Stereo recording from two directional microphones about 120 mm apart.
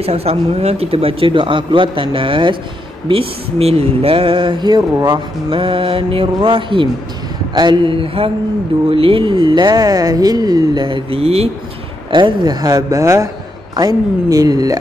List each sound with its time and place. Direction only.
0.0 s speech: 55° right (ahead or behind)
12.1 s speech: 40° right (ahead or behind)